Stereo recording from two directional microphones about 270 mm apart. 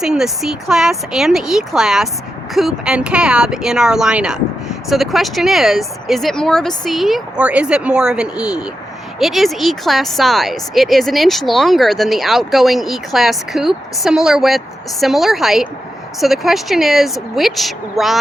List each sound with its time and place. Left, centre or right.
0.0 s speech: centre